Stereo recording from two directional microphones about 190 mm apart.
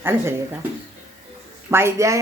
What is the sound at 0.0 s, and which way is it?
Speech, 10° right (ahead or behind).